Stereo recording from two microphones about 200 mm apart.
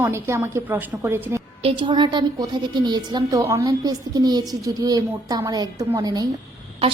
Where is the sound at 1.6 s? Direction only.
25° right (ahead or behind).